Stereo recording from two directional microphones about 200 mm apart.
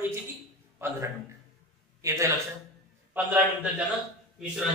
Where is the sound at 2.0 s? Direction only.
15° right (ahead or behind).